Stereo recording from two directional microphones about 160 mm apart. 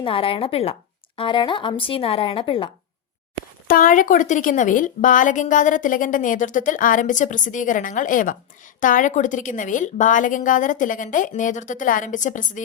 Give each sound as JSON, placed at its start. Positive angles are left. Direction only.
{"t": 0.0, "sound": "speech", "side_deg": 35}
{"t": 3.7, "sound": "a woman's voice", "side_deg": 55}